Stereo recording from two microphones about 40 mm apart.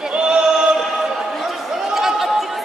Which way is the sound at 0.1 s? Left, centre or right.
Right.